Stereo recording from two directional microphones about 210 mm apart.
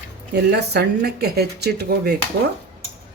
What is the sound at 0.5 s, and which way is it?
Speech, 50° right (ahead or behind).